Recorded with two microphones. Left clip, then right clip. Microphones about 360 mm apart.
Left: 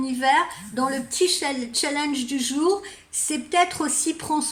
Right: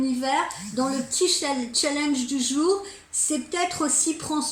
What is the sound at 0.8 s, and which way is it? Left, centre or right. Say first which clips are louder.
A woman's voice: left 2 dB; left.